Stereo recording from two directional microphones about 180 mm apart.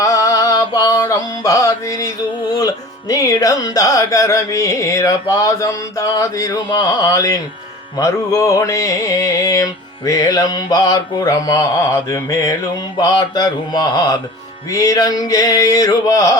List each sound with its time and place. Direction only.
0.0 s music: 20° left (ahead or behind)